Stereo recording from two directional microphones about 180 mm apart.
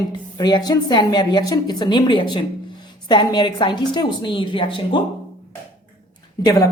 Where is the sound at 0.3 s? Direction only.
20° left (ahead or behind).